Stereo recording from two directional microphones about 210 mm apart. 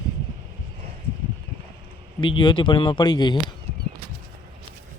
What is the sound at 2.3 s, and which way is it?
Speech, 20° left (ahead or behind).